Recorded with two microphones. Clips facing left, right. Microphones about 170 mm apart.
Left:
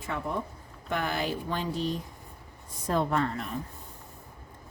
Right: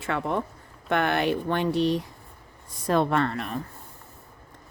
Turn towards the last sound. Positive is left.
turn(degrees=-70)  # may be behind; listen again after turning